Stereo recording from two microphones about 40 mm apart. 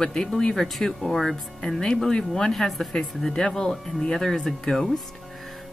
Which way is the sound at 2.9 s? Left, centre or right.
Centre.